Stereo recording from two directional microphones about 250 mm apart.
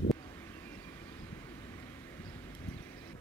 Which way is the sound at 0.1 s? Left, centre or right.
Centre.